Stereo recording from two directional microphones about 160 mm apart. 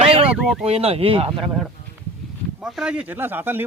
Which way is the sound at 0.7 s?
35° right (ahead or behind).